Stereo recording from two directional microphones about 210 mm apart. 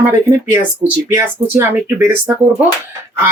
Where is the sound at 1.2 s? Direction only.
10° right (ahead or behind).